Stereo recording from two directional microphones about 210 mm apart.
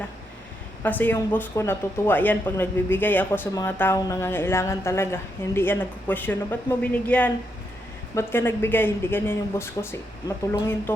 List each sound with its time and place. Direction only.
0.8 s speech: 10° left (ahead or behind)